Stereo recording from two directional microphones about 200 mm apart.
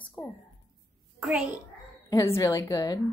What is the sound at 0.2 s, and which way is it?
Speech, 20° left (ahead or behind).